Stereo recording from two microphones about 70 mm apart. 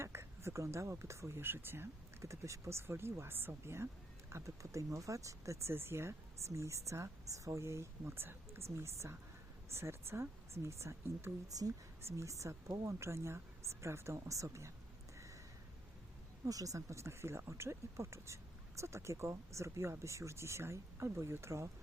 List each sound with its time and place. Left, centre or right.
0.0 s speech: right
2.2 s speech: right
5.7 s speech: right
11.4 s speech: right
12.0 s speech: right
16.5 s speech: right